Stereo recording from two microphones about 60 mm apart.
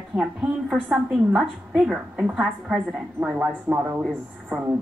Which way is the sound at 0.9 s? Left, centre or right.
Centre.